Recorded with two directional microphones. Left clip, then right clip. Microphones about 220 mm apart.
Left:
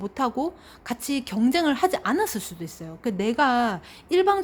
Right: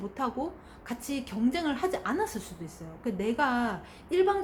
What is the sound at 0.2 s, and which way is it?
A woman's voice, 45° left (ahead or behind).